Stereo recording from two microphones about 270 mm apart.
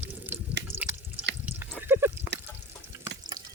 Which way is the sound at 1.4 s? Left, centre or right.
Centre.